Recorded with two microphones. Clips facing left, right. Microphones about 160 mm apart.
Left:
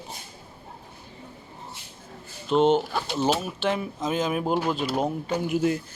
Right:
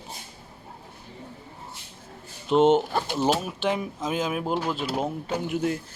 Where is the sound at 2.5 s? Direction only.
20° right (ahead or behind); by 5.7 s 5° left (ahead or behind).